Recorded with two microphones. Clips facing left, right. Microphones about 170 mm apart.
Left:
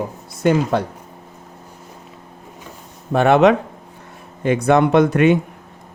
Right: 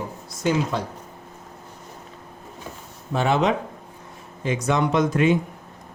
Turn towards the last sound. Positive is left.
turn(degrees=65)  # may be behind; listen again after turning